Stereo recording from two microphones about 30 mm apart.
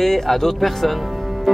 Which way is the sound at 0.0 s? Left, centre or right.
Centre.